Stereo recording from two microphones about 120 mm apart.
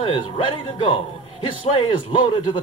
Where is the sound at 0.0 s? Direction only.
50° left (ahead or behind).